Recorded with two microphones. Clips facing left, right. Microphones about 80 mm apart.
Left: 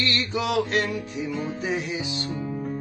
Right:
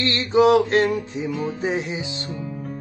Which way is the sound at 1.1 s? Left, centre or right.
Right.